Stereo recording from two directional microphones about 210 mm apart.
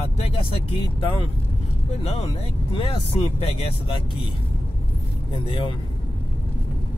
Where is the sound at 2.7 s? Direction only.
25° left (ahead or behind).